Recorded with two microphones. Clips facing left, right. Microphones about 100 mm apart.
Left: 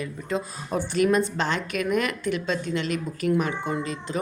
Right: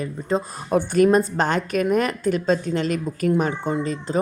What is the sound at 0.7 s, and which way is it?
Speech, 55° right (ahead or behind).